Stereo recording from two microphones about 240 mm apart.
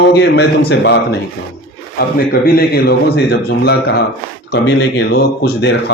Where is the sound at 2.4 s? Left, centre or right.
Left.